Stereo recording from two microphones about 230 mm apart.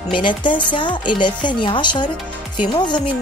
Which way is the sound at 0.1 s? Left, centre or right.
Left.